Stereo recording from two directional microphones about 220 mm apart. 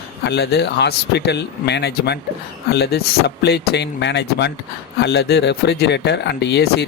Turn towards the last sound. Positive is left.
turn(degrees=50)  # may be behind; listen again after turning